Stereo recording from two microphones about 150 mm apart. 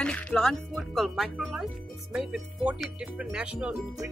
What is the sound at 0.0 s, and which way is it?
Speech, 5° left (ahead or behind).